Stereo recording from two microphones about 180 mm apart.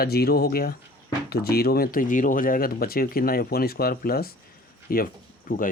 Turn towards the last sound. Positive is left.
turn(degrees=50)  # may be behind; listen again after turning